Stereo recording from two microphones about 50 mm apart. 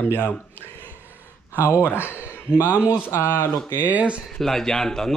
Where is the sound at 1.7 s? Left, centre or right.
Left.